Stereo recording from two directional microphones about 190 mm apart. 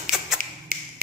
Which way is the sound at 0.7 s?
50° right (ahead or behind).